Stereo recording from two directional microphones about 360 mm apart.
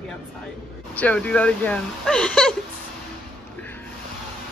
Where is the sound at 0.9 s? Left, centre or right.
Centre.